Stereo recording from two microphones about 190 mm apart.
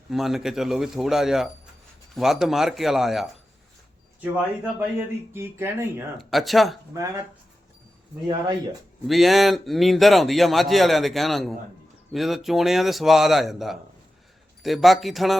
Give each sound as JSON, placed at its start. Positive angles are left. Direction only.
{"t": 0.1, "sound": "speech", "side_deg": 0}
{"t": 6.1, "sound": "speech", "side_deg": 0}
{"t": 8.3, "sound": "speech", "side_deg": -25}
{"t": 9.0, "sound": "speech", "side_deg": 0}